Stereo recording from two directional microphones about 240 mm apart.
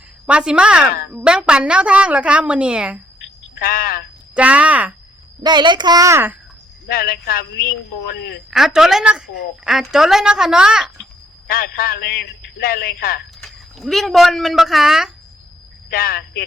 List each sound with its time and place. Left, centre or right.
0.3 s a woman's voice: centre
3.5 s a man's voice: left
4.4 s a woman's voice: centre
5.4 s a child's voice: centre
6.8 s a man's voice: left
8.4 s a woman's voice: centre
11.4 s a man's voice: left
13.4 s speech: centre
15.9 s a man's voice: left